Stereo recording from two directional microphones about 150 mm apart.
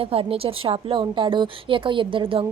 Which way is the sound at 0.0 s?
40° right (ahead or behind).